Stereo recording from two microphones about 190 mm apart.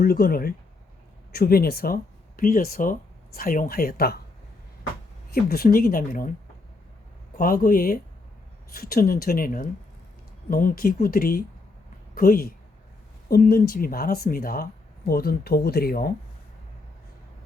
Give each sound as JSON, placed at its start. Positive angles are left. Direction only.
{"t": 0.0, "sound": "speech", "side_deg": 50}
{"t": 5.3, "sound": "speech", "side_deg": 50}
{"t": 7.3, "sound": "speech", "side_deg": 50}